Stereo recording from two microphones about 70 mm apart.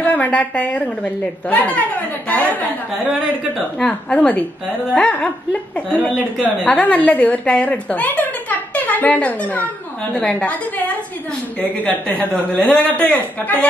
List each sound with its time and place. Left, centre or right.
0.0 s a woman's voice: left
3.8 s a woman's voice: centre
11.8 s a man's voice: left
12.5 s a man's voice: centre